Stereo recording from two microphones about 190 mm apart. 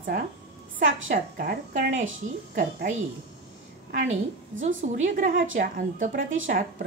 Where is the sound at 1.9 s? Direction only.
90° right.